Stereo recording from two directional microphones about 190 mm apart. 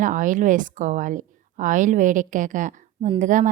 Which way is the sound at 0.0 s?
40° right (ahead or behind).